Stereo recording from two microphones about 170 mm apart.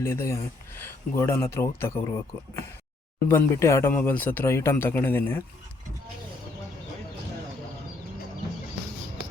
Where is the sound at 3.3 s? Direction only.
15° left (ahead or behind).